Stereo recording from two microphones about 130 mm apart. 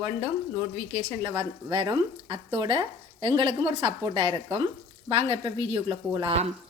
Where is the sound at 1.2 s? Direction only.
25° right (ahead or behind).